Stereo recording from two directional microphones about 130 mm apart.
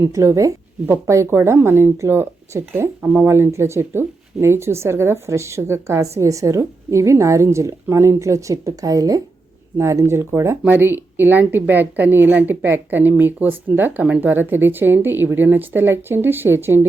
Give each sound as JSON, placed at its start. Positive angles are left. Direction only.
{"t": 0.0, "sound": "a woman's voice", "side_deg": -20}